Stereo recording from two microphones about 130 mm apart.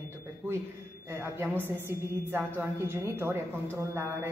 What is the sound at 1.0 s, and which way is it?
A woman's voice, 20° right (ahead or behind).